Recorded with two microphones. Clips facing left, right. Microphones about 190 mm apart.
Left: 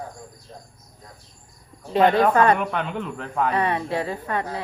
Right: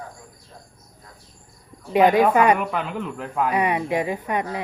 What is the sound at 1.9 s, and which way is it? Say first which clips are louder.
Speech: right 1 dB; 10° right (ahead or behind).